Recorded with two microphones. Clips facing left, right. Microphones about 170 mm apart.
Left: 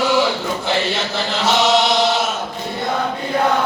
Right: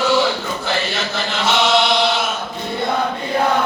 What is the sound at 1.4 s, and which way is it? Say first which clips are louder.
Chant: left 1 dB; 40° left (ahead or behind).